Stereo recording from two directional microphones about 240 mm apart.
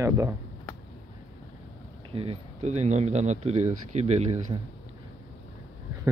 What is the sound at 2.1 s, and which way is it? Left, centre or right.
Speech, right.